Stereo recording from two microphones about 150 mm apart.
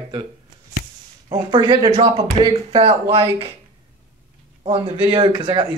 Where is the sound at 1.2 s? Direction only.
30° right (ahead or behind).